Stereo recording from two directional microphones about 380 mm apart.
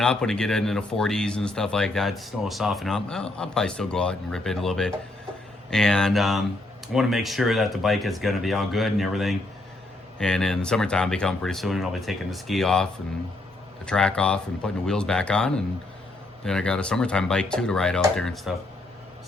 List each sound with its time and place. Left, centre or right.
0.0 s speech: centre